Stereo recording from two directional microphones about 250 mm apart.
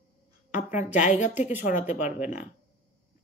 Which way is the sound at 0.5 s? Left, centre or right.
Left.